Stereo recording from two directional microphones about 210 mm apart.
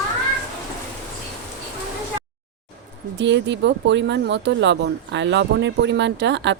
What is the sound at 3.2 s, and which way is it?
Speech, 55° right (ahead or behind).